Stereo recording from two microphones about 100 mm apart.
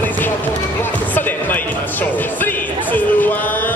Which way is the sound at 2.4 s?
20° left (ahead or behind).